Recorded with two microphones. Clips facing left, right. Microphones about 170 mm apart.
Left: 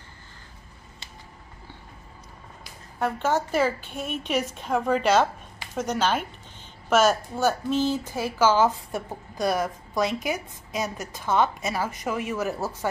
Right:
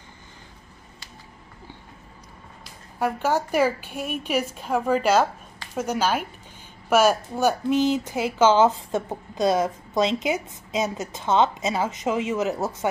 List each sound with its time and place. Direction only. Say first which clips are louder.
3.0 s a woman's voice: right 1 dB; 10° right (ahead or behind)